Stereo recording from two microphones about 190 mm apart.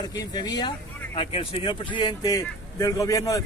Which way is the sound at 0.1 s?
20° left (ahead or behind).